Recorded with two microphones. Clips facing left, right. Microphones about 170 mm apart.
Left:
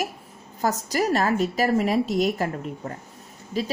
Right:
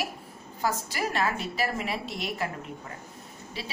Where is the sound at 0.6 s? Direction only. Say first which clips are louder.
Left 6 dB; 40° left (ahead or behind).